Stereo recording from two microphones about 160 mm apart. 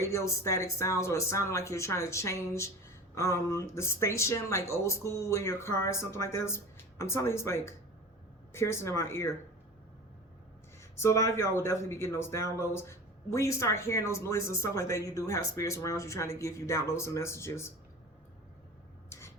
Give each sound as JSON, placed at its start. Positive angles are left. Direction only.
{"t": 0.0, "sound": "speech", "side_deg": 20}
{"t": 10.9, "sound": "speech", "side_deg": 20}